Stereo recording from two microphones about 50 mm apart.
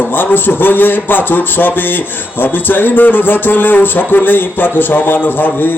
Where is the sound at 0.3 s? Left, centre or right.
Left.